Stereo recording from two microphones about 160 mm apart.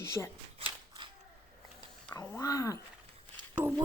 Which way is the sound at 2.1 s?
20° left (ahead or behind).